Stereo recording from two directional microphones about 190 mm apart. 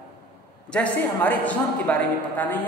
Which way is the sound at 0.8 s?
5° left (ahead or behind).